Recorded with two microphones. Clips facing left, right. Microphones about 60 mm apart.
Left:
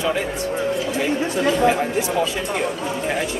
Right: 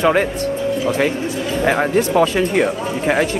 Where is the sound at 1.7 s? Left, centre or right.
Right.